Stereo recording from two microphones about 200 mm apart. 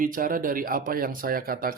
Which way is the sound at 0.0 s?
45° right (ahead or behind).